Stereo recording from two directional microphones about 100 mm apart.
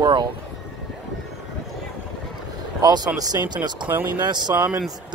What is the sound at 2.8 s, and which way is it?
Speech, 45° right (ahead or behind).